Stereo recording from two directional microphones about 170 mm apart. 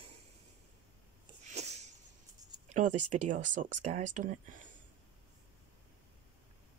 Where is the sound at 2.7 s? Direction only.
45° right (ahead or behind).